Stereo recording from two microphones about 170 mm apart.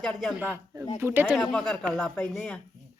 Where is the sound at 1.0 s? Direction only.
15° right (ahead or behind).